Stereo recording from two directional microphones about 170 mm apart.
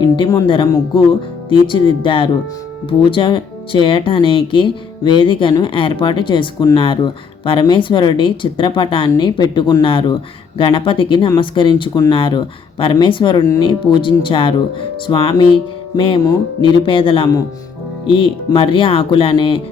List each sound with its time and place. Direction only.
0.2 s speech: 25° left (ahead or behind)
15.0 s music: 30° left (ahead or behind)